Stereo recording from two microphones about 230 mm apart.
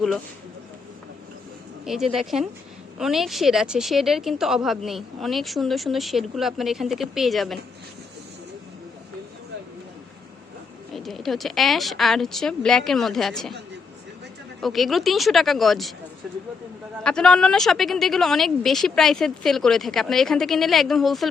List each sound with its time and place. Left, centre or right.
1.8 s speech: centre
10.9 s speech: centre
14.6 s speech: centre